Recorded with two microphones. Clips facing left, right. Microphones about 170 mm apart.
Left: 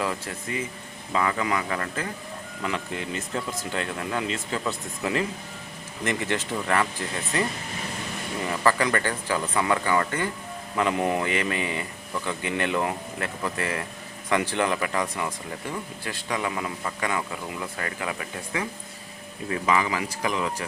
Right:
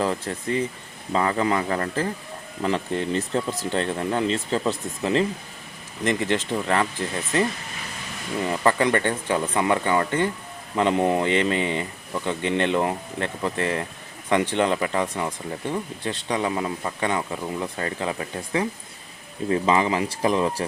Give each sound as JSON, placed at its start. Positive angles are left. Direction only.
{"t": 0.0, "sound": "speech", "side_deg": -30}
{"t": 8.4, "sound": "speech", "side_deg": -25}